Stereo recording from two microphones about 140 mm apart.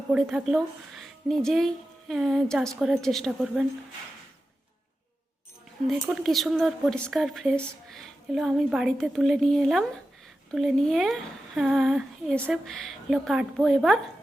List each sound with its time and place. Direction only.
0.1 s speech: 5° right (ahead or behind)
5.9 s speech: centre (ahead or behind)